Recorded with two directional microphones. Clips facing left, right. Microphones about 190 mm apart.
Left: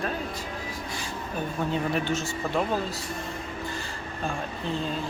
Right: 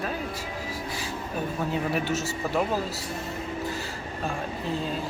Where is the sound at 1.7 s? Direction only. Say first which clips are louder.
Even; 5° right (ahead or behind).